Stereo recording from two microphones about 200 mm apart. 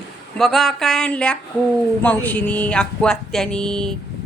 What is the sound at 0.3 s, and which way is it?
Music, centre (ahead or behind).